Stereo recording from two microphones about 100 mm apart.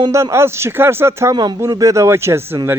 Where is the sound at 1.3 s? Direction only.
45° right (ahead or behind); by 2.6 s 25° right (ahead or behind).